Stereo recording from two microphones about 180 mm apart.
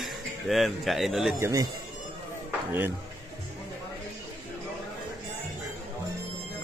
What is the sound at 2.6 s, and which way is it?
Speech, 10° right (ahead or behind).